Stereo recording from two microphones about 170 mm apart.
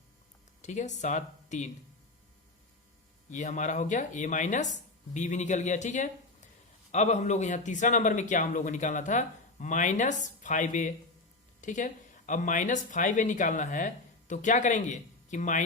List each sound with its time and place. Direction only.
0.6 s speech: 45° left (ahead or behind)
3.2 s speech: 45° left (ahead or behind)